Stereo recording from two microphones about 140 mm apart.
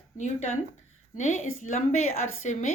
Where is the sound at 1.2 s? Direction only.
60° left (ahead or behind).